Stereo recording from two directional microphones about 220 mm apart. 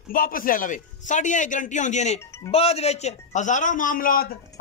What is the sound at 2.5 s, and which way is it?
A man's voice, 25° left (ahead or behind).